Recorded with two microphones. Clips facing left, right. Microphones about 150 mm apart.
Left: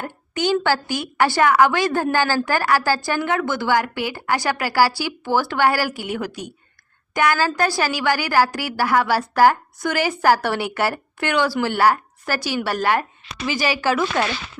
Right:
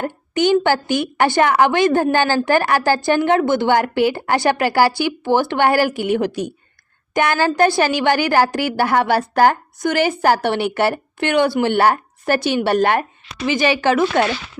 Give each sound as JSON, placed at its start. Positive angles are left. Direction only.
{"t": 0.3, "sound": "a woman's voice", "side_deg": -20}